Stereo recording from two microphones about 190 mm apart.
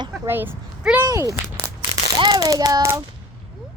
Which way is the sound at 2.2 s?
20° right (ahead or behind).